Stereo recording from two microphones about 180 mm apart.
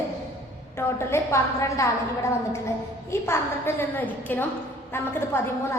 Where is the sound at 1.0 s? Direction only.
15° left (ahead or behind).